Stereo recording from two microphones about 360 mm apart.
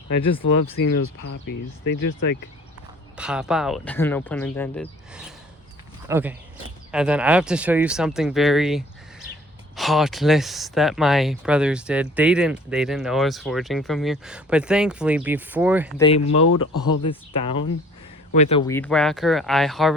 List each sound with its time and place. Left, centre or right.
0.4 s speech: left
3.2 s speech: centre
16.0 s speech: centre
16.3 s speech: left
17.0 s speech: centre